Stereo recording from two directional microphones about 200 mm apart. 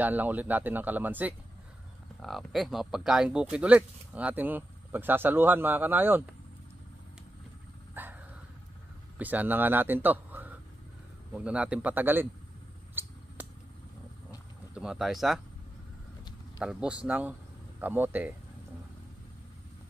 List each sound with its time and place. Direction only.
0.0 s speech: 10° right (ahead or behind)
7.9 s a sound: 10° right (ahead or behind)
9.2 s speech: 10° right (ahead or behind)
13.0 s a sound: 10° right (ahead or behind)
14.7 s speech: 5° right (ahead or behind)
16.5 s speech: 5° right (ahead or behind)